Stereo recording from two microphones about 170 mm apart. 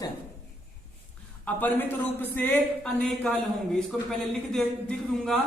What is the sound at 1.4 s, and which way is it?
A man's voice, 10° left (ahead or behind).